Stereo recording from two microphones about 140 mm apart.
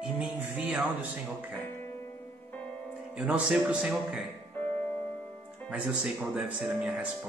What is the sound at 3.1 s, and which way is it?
Speech, 5° right (ahead or behind).